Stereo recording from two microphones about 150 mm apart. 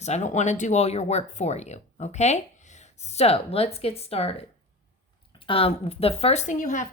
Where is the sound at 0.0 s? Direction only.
50° left (ahead or behind).